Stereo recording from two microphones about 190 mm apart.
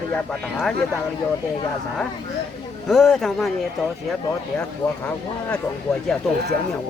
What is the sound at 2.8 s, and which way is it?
Speech, centre (ahead or behind).